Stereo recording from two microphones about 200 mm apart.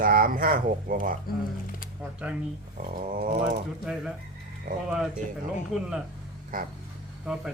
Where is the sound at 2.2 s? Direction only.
5° right (ahead or behind).